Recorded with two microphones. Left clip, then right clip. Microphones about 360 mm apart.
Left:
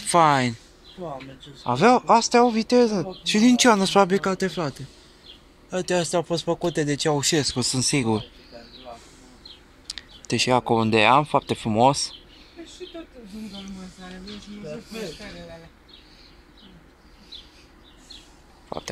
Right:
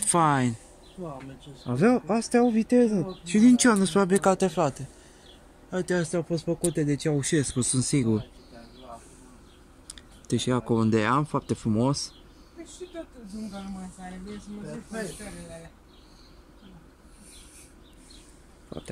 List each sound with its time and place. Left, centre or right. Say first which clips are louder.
0.1 s speech: left 5 dB; centre
1.7 s speech: left 8 dB; centre
3.4 s speech: left 3 dB; centre
6.4 s speech: left 4 dB; left
7.0 s speech: left 5 dB; centre
9.8 s speech: left 4 dB; centre